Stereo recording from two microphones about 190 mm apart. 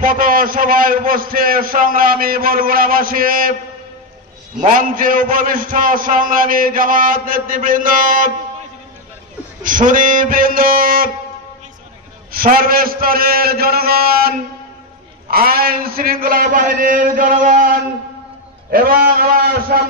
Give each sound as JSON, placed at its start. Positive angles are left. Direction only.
{"t": 0.0, "sound": "a man's voice", "side_deg": -45}
{"t": 4.6, "sound": "a man's voice", "side_deg": -45}
{"t": 9.6, "sound": "a man's voice", "side_deg": -45}
{"t": 12.3, "sound": "a man's voice", "side_deg": -50}